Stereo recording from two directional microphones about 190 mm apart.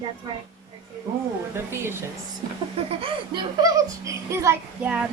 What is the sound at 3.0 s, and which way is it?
A child's voice, 25° right (ahead or behind).